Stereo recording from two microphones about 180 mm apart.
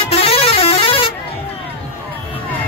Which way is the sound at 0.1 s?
35° left (ahead or behind).